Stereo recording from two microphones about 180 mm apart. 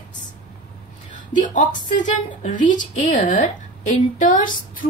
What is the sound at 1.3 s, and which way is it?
A woman's voice, 45° left (ahead or behind).